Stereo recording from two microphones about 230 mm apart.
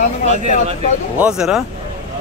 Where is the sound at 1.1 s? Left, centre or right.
Centre.